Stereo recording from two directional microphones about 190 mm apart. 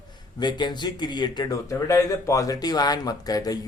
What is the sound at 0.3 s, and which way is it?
Speech, 25° left (ahead or behind).